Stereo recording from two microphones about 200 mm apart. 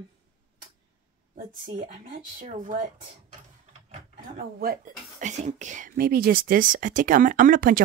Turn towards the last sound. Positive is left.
turn(degrees=-45)  # may be behind; listen again after turning